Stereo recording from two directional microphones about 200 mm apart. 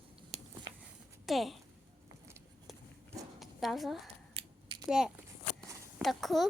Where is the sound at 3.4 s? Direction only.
Centre (ahead or behind).